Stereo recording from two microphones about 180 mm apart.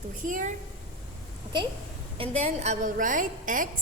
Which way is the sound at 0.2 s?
45° right (ahead or behind).